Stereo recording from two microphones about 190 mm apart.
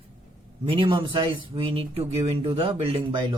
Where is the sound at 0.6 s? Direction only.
25° right (ahead or behind).